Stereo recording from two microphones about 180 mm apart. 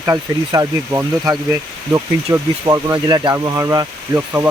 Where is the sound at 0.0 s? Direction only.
15° right (ahead or behind).